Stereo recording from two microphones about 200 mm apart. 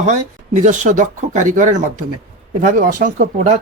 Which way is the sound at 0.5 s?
35° right (ahead or behind).